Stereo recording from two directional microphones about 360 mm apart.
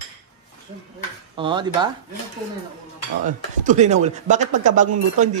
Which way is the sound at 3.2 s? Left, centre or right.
Right.